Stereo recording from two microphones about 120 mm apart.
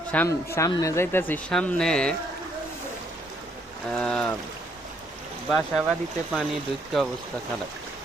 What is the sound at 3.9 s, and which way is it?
Speech, 10° left (ahead or behind).